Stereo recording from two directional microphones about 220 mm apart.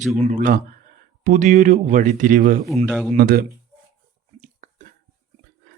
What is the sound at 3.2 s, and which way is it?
Speech, 45° right (ahead or behind).